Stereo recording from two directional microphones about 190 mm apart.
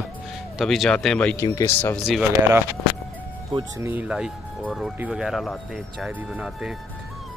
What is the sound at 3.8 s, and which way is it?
Speech, 10° right (ahead or behind).